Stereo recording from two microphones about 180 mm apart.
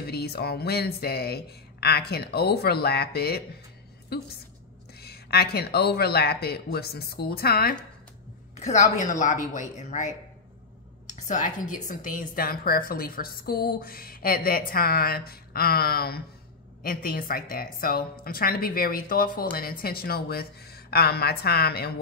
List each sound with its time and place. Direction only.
0.0 s a woman's voice: 60° left (ahead or behind)
8.5 s a woman's voice: 40° left (ahead or behind); by 21.9 s 60° left (ahead or behind)